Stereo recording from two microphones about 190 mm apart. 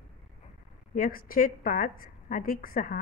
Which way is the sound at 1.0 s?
50° left (ahead or behind).